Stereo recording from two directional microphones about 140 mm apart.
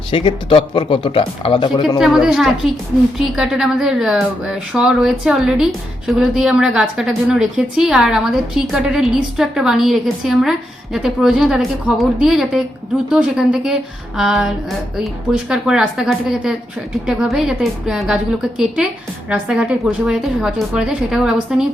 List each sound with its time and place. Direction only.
0.1 s speech: 40° left (ahead or behind)
2.2 s a woman's voice: centre (ahead or behind)